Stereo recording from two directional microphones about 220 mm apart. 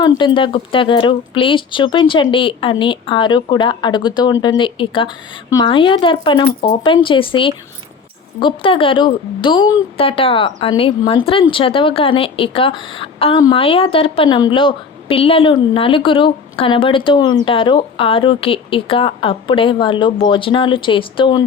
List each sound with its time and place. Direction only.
0.2 s speech: 20° left (ahead or behind)